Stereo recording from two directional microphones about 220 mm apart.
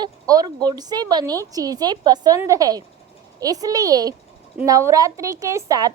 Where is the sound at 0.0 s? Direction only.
20° right (ahead or behind).